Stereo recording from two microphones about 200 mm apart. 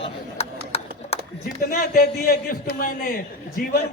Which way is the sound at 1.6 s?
50° left (ahead or behind).